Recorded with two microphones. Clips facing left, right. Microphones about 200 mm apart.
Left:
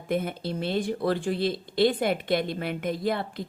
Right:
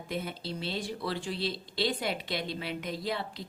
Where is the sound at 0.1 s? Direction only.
55° left (ahead or behind).